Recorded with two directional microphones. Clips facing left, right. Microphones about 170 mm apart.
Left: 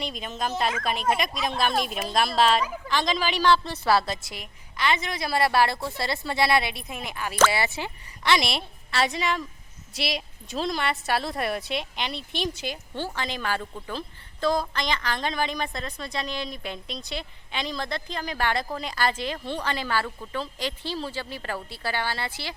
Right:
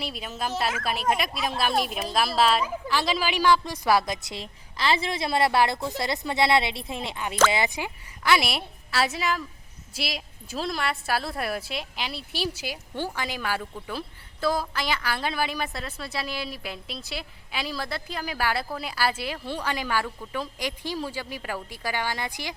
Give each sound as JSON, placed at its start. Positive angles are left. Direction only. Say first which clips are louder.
{"t": 0.0, "sound": "a woman's voice", "louder": "left 1 dB", "side_deg": -5}
{"t": 4.8, "sound": "a woman's voice", "louder": "right 1 dB", "side_deg": -30}